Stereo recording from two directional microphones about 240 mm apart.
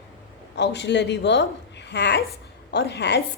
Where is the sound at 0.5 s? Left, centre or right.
Left.